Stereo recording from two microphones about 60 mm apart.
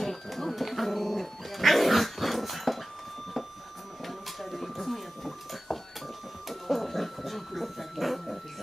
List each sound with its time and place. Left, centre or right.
0.0 s dog: centre
4.0 s a sound: centre
6.5 s dog: centre